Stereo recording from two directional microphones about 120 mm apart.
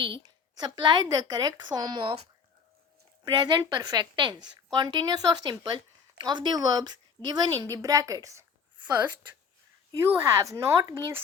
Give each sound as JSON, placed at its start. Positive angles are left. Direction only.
{"t": 0.0, "sound": "a woman's voice", "side_deg": -45}
{"t": 3.2, "sound": "a woman's voice", "side_deg": -35}
{"t": 10.1, "sound": "speech", "side_deg": -25}